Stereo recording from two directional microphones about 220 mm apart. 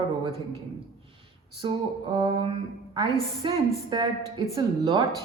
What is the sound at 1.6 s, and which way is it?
A woman's voice, 20° right (ahead or behind).